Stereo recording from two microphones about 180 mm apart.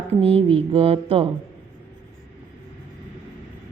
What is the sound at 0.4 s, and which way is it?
Speech, 30° right (ahead or behind).